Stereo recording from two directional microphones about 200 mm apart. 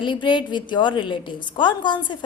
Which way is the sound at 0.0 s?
25° left (ahead or behind).